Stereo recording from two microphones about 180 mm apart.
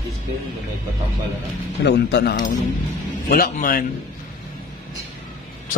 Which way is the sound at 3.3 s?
50° left (ahead or behind).